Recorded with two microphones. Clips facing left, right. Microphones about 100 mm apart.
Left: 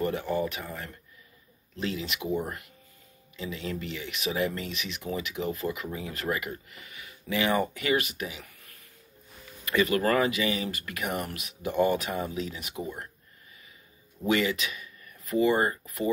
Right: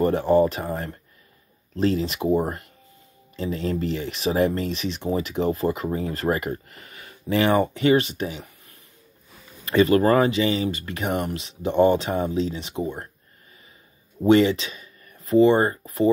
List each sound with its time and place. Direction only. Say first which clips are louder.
0.0 s speech: right 10 dB; 35° right (ahead or behind)
14.2 s speech: right 9 dB; 30° right (ahead or behind)